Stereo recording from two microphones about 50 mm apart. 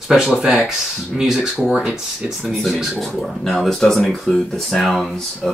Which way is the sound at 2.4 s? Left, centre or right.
Centre.